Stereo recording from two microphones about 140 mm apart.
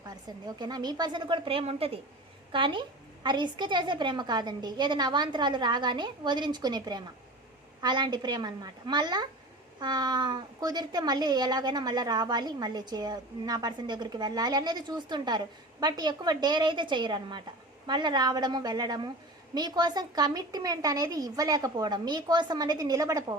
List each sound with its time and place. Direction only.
0.0 s a woman's voice: 30° right (ahead or behind)